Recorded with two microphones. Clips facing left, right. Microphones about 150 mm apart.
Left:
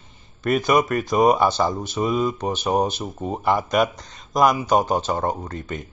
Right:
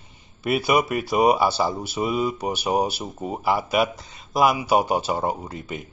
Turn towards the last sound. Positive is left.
turn(degrees=-10)  # may be behind; listen again after turning